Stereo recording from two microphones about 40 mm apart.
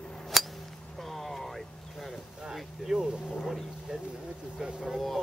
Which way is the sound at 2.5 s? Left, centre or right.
Centre.